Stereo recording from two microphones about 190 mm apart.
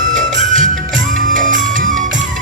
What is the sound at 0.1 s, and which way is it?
Music, 40° right (ahead or behind).